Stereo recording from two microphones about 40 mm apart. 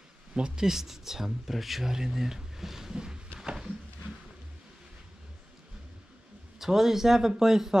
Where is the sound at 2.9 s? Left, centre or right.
Centre.